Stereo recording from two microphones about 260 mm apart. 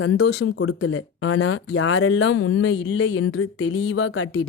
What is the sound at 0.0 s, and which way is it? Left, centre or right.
Speech, left.